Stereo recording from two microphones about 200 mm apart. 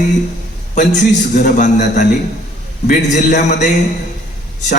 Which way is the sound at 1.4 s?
35° left (ahead or behind).